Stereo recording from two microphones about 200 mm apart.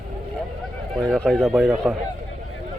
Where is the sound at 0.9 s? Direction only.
Centre (ahead or behind).